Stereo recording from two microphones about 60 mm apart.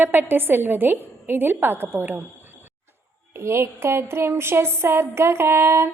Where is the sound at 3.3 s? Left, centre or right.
Right.